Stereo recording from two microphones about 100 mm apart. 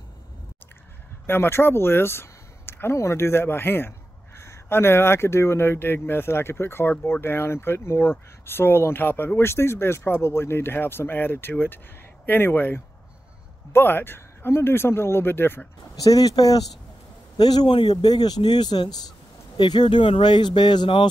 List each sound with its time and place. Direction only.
1.2 s speech: 20° left (ahead or behind)
16.0 s speech: 40° left (ahead or behind)